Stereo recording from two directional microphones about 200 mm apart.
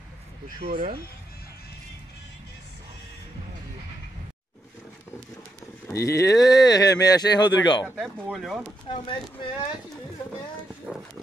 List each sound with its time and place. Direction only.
0.6 s speech: 45° right (ahead or behind)
5.9 s speech: 15° left (ahead or behind)
7.8 s speech: 5° right (ahead or behind)
8.8 s speech: 25° left (ahead or behind)
10.9 s wild animals: 5° right (ahead or behind)